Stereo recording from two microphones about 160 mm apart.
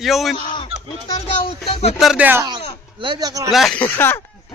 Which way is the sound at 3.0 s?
25° right (ahead or behind).